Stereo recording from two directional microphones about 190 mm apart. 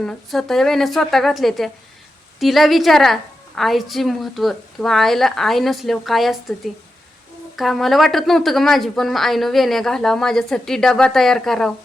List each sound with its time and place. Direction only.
0.0 s a woman's voice: centre (ahead or behind)
7.5 s a woman's voice: centre (ahead or behind)